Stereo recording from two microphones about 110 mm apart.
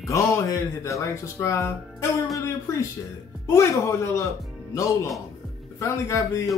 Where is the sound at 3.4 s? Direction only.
25° left (ahead or behind).